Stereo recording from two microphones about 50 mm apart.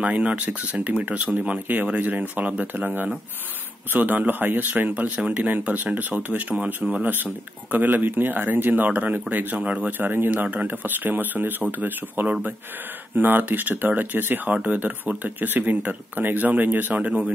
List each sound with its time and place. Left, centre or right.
0.0 s speech: right
10.3 s speech: right